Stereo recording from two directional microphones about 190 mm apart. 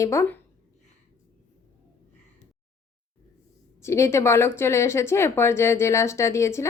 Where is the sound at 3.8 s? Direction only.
15° left (ahead or behind).